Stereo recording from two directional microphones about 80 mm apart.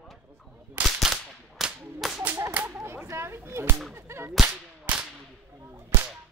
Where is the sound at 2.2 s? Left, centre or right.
Right.